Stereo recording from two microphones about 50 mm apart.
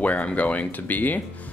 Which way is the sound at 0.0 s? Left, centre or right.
Left.